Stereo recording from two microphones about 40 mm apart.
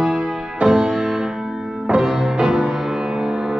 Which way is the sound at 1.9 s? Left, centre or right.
Centre.